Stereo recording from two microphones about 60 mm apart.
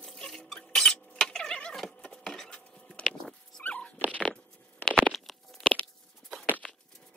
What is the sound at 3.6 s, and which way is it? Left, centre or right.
Dog, left.